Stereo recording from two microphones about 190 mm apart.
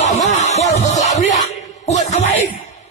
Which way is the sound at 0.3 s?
35° left (ahead or behind).